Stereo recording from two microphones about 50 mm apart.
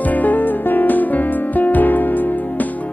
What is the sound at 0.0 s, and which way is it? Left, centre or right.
Music, left.